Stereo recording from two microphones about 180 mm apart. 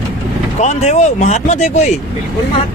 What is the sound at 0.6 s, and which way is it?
Speech, 40° left (ahead or behind).